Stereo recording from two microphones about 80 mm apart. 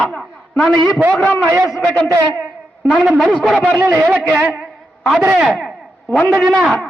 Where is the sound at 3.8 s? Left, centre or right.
Right.